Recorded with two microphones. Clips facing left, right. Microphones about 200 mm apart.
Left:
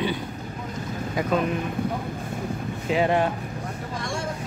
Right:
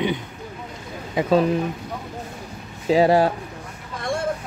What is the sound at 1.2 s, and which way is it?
Speech, 30° right (ahead or behind).